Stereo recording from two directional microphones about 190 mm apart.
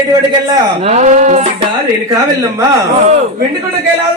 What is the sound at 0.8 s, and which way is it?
Speech, 40° right (ahead or behind).